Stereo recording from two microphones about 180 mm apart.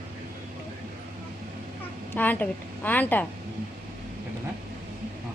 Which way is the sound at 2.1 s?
10° left (ahead or behind).